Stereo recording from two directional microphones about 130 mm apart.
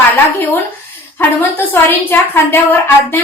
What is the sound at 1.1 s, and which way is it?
A woman's voice, 20° left (ahead or behind).